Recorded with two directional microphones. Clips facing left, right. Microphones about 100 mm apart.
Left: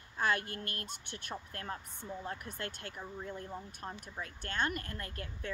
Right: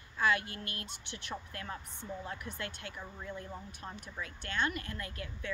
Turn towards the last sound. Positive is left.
turn(degrees=40)  # may be behind; listen again after turning